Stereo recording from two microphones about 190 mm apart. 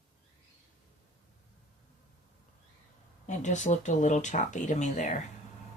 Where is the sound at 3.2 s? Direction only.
40° left (ahead or behind).